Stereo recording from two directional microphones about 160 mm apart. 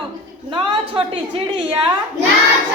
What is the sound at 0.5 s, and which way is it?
Speech, 30° right (ahead or behind).